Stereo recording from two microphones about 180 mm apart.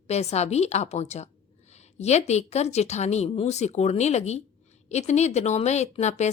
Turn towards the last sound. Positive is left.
turn(degrees=40)  # may be behind; listen again after turning